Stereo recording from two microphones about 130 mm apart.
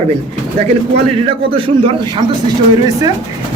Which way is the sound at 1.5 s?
45° right (ahead or behind).